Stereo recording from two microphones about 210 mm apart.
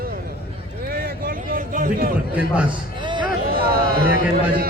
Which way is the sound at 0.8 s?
45° right (ahead or behind).